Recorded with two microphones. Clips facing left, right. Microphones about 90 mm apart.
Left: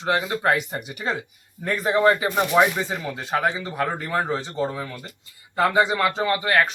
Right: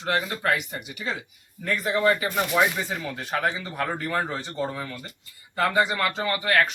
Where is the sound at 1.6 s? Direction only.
30° left (ahead or behind).